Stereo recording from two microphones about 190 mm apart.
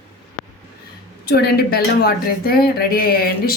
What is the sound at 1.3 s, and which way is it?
A woman's voice, 55° left (ahead or behind).